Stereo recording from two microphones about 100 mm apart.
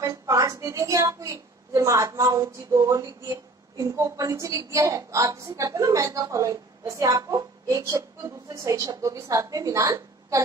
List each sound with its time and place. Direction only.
0.0 s a woman's voice: 35° right (ahead or behind)